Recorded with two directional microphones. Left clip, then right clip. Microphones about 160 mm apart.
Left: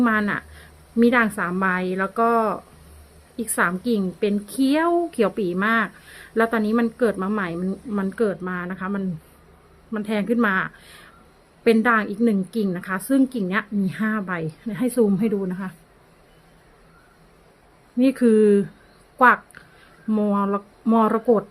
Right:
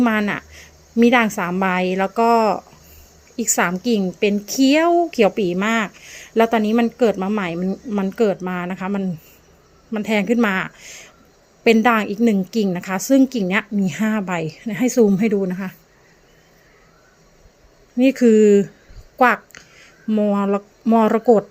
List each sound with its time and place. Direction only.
0.0 s a woman's voice: 15° right (ahead or behind)
17.9 s a woman's voice: 10° right (ahead or behind)